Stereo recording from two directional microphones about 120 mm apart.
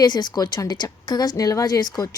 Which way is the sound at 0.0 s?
35° left (ahead or behind).